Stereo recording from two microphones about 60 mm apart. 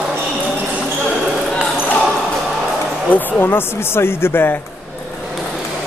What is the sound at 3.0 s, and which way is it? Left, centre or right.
Speech, left.